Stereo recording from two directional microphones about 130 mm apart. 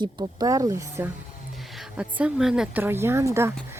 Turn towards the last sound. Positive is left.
turn(degrees=-20)  # may be behind; listen again after turning